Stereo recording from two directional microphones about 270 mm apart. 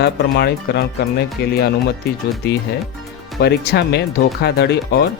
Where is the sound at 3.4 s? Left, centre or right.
Left.